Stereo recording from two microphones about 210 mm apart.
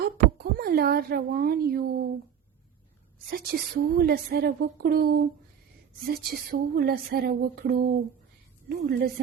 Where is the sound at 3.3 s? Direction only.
45° right (ahead or behind).